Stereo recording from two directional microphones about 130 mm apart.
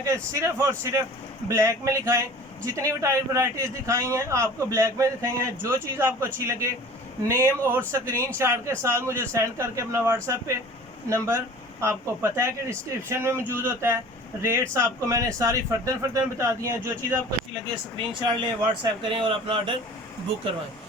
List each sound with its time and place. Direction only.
0.0 s a man's voice: 20° right (ahead or behind)
17.5 s speech: 40° right (ahead or behind)